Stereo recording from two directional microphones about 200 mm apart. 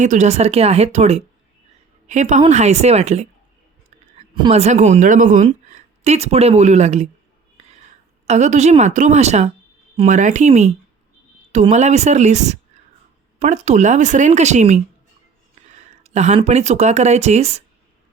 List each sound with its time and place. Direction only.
0.0 s speech: 35° right (ahead or behind)
7.6 s whispering: 35° right (ahead or behind)
8.3 s speech: 35° right (ahead or behind)